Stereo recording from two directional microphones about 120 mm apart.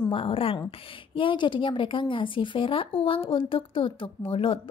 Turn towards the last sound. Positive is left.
turn(degrees=50)  # may be behind; listen again after turning